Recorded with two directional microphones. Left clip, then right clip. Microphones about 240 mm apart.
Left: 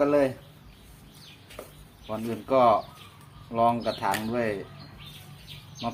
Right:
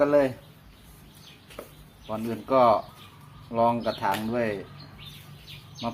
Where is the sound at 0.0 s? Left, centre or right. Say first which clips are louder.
Right 1 dB; centre.